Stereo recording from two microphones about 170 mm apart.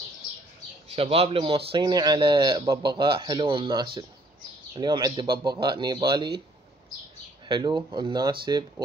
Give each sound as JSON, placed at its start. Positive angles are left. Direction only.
{"t": 0.8, "sound": "a man's voice", "side_deg": -35}
{"t": 7.4, "sound": "a man's voice", "side_deg": -25}